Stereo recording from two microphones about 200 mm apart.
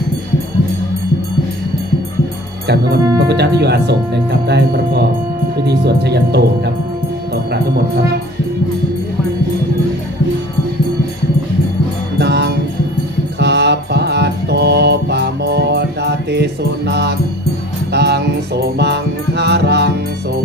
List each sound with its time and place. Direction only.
3.2 s speech: 55° right (ahead or behind)
12.2 s music: 55° right (ahead or behind)